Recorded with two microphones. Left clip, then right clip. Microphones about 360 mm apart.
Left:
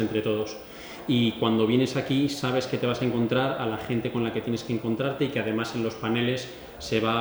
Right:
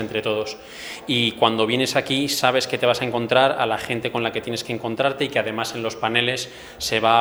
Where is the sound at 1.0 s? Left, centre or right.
Right.